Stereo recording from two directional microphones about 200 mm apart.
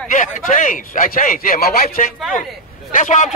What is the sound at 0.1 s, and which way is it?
Speech, 40° left (ahead or behind).